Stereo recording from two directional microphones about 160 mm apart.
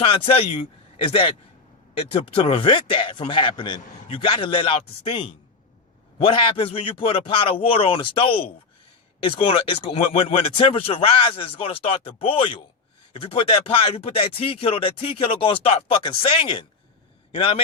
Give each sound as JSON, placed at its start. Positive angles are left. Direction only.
{"t": 0.3, "sound": "speech", "side_deg": 35}